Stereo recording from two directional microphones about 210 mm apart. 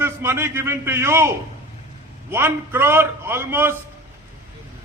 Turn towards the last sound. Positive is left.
turn(degrees=-10)  # may be behind; listen again after turning